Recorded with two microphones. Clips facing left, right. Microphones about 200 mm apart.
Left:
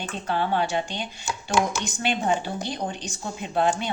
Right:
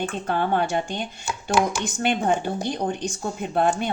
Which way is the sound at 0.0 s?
50° right (ahead or behind).